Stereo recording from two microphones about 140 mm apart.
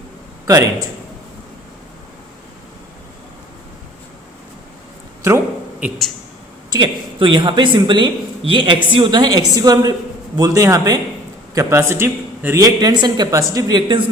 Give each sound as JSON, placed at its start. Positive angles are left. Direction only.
{"t": 0.4, "sound": "a man's voice", "side_deg": -25}
{"t": 6.7, "sound": "a woman's voice", "side_deg": -30}